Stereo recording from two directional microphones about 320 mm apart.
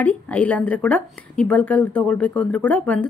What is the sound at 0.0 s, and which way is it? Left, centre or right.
A woman's voice, centre.